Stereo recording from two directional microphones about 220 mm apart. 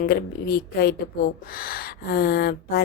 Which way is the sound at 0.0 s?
45° left (ahead or behind).